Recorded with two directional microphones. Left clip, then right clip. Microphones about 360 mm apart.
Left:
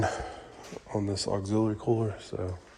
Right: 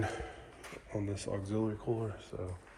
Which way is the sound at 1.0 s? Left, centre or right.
Centre.